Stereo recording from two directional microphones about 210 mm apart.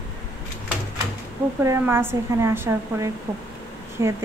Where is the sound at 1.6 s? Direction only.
10° right (ahead or behind).